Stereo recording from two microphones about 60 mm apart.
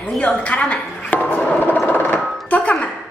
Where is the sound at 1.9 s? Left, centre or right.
Left.